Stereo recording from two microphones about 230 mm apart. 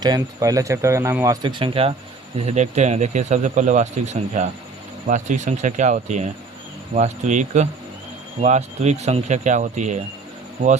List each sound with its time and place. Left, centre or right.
0.0 s a man's voice: centre; by 10.0 s right